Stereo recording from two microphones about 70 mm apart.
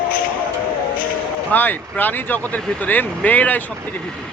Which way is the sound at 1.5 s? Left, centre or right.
Left.